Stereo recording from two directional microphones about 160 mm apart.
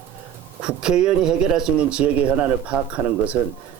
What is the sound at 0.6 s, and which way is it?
A man's voice, 5° right (ahead or behind).